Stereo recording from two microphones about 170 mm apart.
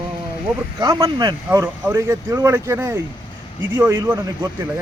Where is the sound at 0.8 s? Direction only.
20° right (ahead or behind).